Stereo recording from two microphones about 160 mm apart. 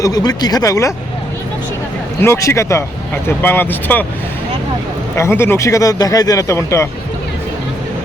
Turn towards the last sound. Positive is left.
turn(degrees=15)  # may be behind; listen again after turning